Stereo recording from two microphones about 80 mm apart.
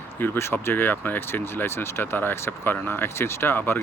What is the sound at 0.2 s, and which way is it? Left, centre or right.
Speech, left.